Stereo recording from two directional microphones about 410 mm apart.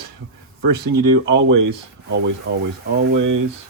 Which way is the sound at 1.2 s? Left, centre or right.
Right.